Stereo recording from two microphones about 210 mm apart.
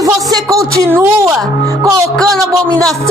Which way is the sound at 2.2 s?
5° left (ahead or behind).